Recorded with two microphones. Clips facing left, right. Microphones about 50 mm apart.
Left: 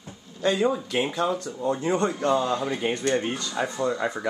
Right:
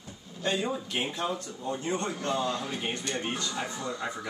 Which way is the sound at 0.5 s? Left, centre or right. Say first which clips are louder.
Left 7 dB; left.